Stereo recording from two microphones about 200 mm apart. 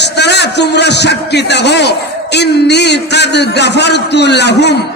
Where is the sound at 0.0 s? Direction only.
60° left (ahead or behind).